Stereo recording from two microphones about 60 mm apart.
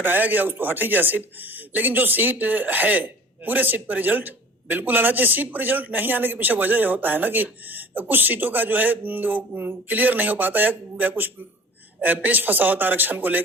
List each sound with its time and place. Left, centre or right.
0.0 s speech: right